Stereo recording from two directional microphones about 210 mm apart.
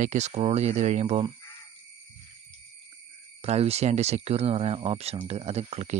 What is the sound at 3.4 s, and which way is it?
Speech, 30° right (ahead or behind).